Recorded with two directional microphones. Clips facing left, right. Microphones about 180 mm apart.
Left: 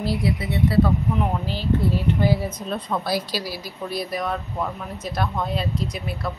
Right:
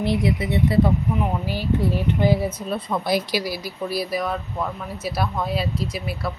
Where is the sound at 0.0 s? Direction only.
20° right (ahead or behind).